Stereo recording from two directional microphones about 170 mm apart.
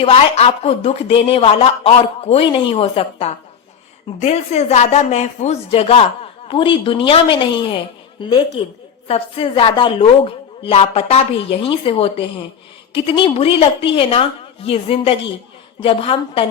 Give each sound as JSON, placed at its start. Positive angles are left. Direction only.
{"t": 0.0, "sound": "a woman's voice", "side_deg": 35}